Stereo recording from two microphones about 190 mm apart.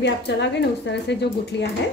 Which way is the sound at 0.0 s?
65° left (ahead or behind).